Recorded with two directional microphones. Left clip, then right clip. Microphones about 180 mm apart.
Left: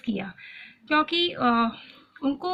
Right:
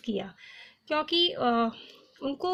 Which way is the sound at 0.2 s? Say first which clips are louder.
Left 2 dB; 45° right (ahead or behind).